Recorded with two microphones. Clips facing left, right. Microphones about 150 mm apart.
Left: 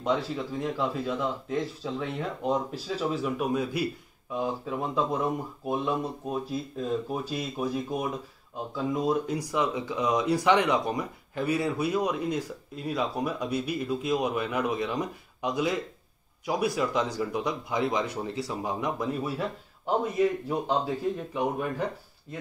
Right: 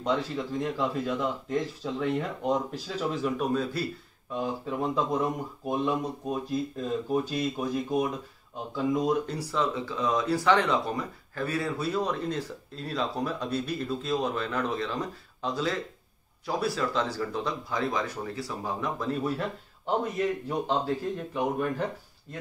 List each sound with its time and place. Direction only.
0.0 s speech: 5° left (ahead or behind)
4.6 s speech: centre (ahead or behind)